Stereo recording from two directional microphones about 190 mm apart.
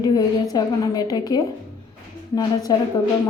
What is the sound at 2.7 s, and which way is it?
Speech, 20° left (ahead or behind).